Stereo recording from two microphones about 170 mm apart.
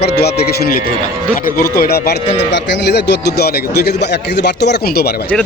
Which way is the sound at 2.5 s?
90° left.